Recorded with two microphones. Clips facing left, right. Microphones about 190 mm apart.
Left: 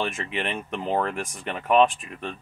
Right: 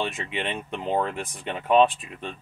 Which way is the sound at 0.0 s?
20° right (ahead or behind).